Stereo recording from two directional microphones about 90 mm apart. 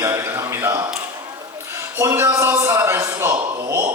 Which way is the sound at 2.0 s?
30° right (ahead or behind).